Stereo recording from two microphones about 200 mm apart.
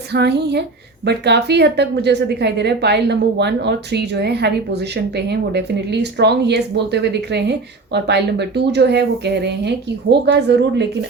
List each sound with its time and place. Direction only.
0.1 s a woman's voice: 55° right (ahead or behind)